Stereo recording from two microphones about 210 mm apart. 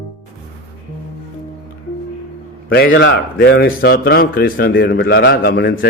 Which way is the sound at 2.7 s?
50° left (ahead or behind).